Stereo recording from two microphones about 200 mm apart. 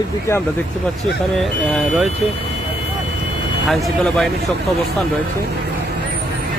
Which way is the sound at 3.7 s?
Centre (ahead or behind).